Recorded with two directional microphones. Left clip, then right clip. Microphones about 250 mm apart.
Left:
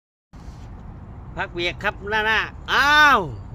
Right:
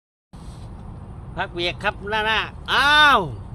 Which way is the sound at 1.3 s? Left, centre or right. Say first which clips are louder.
Even; centre.